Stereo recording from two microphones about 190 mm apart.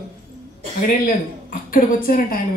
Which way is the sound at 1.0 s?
50° left (ahead or behind).